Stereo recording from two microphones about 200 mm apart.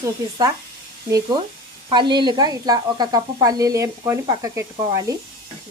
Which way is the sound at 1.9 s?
20° right (ahead or behind).